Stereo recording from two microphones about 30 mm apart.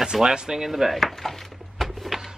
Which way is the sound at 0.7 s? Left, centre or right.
Centre.